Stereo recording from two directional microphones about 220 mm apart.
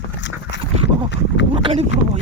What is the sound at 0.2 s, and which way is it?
Dog, 55° left (ahead or behind).